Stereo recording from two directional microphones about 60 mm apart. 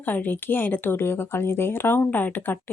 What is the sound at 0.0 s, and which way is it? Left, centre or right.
A woman's voice, left.